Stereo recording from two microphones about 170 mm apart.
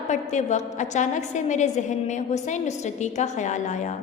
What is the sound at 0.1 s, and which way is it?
A woman's voice, 45° left (ahead or behind).